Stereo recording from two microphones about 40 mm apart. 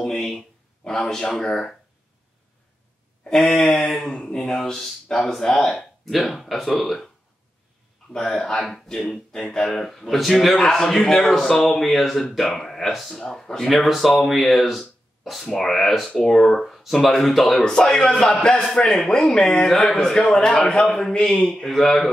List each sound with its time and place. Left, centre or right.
0.0 s a sound: centre
1.3 s a man's voice: centre
3.3 s speech: centre
4.0 s a man's voice: centre
8.3 s a man's voice: centre
13.7 s a man's voice: centre
17.6 s a man's voice: centre